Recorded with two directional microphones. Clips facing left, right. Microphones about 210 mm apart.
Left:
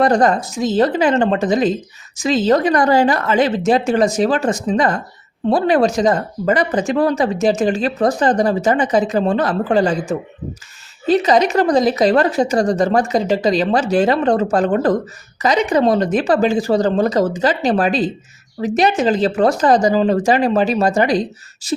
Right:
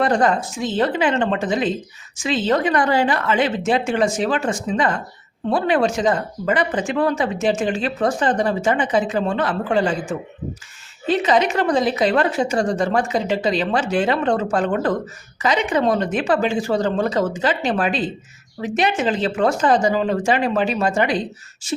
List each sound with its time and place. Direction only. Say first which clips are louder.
0.0 s speech: left 4 dB; 40° left (ahead or behind)